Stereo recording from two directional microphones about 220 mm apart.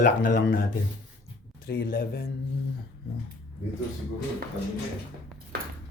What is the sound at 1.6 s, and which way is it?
Speech, 40° left (ahead or behind).